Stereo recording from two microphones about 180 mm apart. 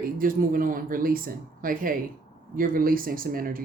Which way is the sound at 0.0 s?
50° right (ahead or behind).